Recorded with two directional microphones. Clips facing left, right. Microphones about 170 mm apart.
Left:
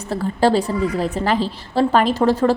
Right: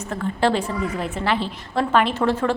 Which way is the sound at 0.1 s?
35° left (ahead or behind).